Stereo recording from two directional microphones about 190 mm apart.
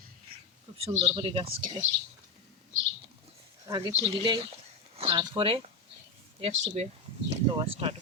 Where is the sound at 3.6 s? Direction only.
20° right (ahead or behind).